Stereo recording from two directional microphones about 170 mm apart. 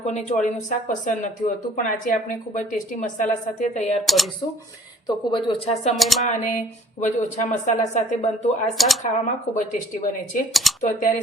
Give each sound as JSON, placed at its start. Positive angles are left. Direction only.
{"t": 0.0, "sound": "speech", "side_deg": 40}
{"t": 4.0, "sound": "speech", "side_deg": 0}
{"t": 5.0, "sound": "speech", "side_deg": 30}
{"t": 6.0, "sound": "speech", "side_deg": 0}
{"t": 6.2, "sound": "speech", "side_deg": 45}
{"t": 10.5, "sound": "speech", "side_deg": 0}
{"t": 10.8, "sound": "speech", "side_deg": 50}